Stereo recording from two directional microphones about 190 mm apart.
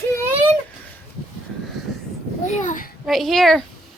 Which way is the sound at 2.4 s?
40° left (ahead or behind).